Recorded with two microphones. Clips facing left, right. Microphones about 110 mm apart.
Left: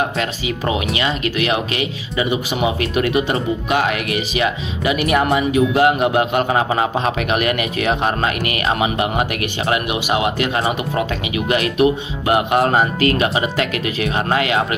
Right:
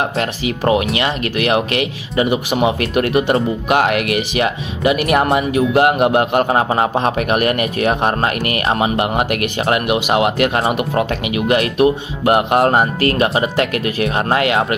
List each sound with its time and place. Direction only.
0.2 s speech: 50° right (ahead or behind)